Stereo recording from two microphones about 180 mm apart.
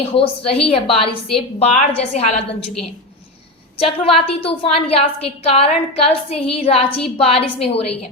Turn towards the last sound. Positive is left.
turn(degrees=35)  # may be behind; listen again after turning